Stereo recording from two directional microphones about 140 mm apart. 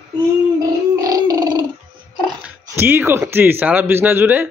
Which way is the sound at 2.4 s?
15° right (ahead or behind).